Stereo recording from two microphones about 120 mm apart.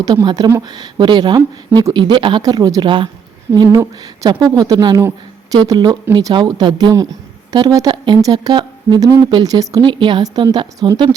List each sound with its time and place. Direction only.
0.0 s a woman's voice: 35° right (ahead or behind)